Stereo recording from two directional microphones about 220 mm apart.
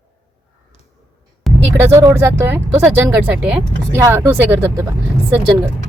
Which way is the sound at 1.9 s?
15° right (ahead or behind).